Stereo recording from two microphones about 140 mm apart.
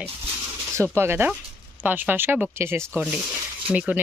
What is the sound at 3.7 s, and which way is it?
Speech, 5° right (ahead or behind).